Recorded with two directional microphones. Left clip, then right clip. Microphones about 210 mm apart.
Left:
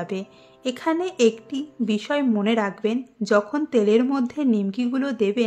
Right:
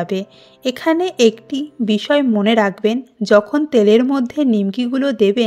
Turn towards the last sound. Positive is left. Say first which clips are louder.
# right 7 dB
turn(degrees=-30)  # may be behind; listen again after turning